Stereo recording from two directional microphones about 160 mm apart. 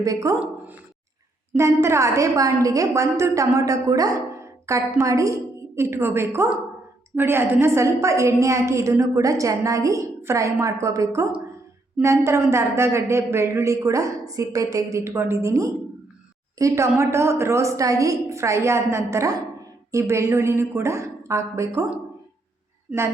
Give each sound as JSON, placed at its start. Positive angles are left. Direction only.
{"t": 0.0, "sound": "a woman's voice", "side_deg": -20}
{"t": 1.5, "sound": "a woman's voice", "side_deg": -15}